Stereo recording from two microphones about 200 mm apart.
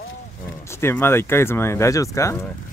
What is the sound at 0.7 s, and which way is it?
Speech, 10° left (ahead or behind).